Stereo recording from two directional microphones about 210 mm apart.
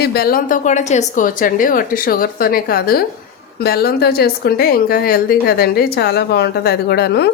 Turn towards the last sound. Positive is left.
turn(degrees=50)  # may be behind; listen again after turning